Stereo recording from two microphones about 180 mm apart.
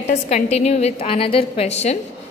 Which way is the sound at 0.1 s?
40° left (ahead or behind).